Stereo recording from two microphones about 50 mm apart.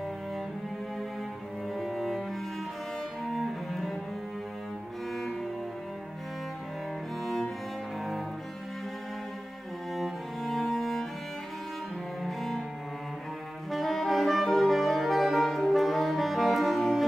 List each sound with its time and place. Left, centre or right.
1.8 s cello: centre
3.3 s cello: centre
9.9 s cello: centre
12.2 s music: centre
13.7 s music: centre